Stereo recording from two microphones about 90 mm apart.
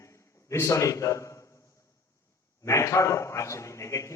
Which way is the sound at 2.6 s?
35° left (ahead or behind).